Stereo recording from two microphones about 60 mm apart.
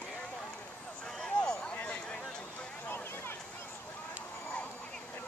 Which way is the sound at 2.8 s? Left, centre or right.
Left.